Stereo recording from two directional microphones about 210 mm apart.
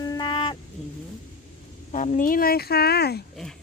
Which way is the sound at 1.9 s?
35° left (ahead or behind).